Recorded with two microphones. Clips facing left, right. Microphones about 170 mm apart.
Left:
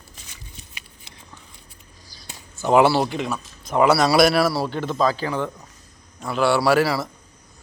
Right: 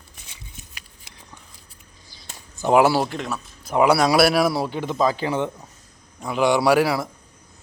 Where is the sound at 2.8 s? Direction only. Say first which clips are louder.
Left 1 dB; 5° right (ahead or behind).